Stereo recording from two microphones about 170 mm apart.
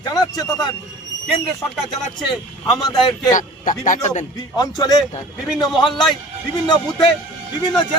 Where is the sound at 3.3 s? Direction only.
50° left (ahead or behind).